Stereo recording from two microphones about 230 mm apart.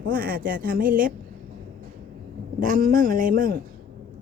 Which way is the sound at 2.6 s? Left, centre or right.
Right.